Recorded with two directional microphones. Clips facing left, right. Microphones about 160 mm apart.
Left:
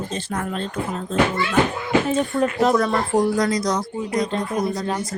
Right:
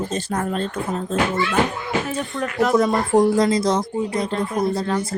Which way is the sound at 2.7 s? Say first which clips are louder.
Right 2 dB; 20° right (ahead or behind).